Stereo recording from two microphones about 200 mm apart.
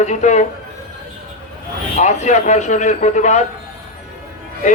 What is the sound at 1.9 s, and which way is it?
Speech, 35° left (ahead or behind).